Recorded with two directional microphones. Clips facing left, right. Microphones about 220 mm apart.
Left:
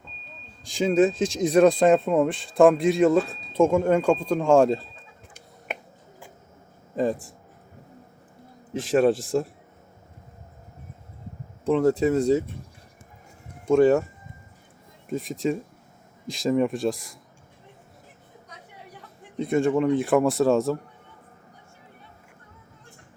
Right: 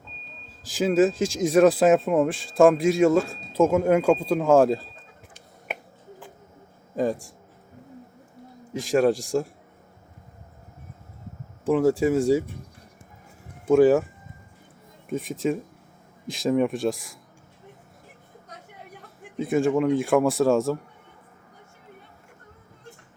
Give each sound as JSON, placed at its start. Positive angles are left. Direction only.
{"t": 0.6, "sound": "speech", "side_deg": -5}
{"t": 6.9, "sound": "speech", "side_deg": 0}
{"t": 8.7, "sound": "speech", "side_deg": 0}
{"t": 11.6, "sound": "speech", "side_deg": -5}
{"t": 13.7, "sound": "speech", "side_deg": -5}
{"t": 15.1, "sound": "speech", "side_deg": 0}
{"t": 18.4, "sound": "a sound", "side_deg": -50}
{"t": 19.4, "sound": "speech", "side_deg": 0}